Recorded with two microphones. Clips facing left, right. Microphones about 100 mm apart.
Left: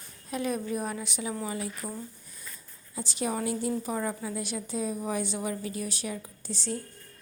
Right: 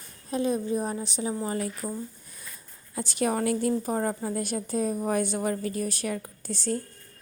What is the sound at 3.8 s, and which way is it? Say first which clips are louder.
A woman's voice: right 4 dB; 45° right (ahead or behind).